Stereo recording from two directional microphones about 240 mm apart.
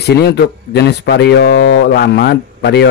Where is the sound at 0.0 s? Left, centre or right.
Left.